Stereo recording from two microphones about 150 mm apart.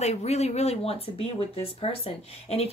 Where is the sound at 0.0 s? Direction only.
45° left (ahead or behind).